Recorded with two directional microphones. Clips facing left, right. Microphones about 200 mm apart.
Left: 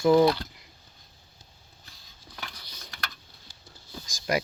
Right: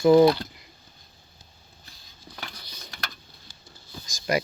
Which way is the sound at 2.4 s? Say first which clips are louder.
Right 1 dB; 25° right (ahead or behind).